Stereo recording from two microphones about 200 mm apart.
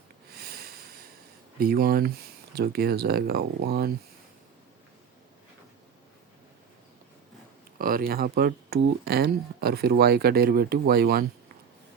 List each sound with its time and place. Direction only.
0.3 s a sound: 50° right (ahead or behind)
1.5 s speech: 50° right (ahead or behind)
7.8 s speech: 45° right (ahead or behind)